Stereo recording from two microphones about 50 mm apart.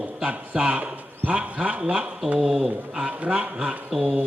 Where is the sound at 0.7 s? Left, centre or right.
Right.